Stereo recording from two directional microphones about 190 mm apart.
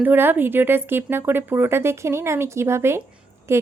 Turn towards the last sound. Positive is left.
turn(degrees=-15)  # may be behind; listen again after turning